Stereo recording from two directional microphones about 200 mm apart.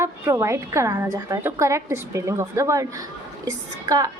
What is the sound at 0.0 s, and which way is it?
A woman's voice, 15° right (ahead or behind).